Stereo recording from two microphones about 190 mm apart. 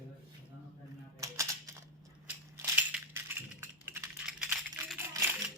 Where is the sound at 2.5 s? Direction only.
10° right (ahead or behind).